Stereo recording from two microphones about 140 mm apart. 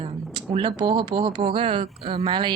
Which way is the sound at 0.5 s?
35° right (ahead or behind).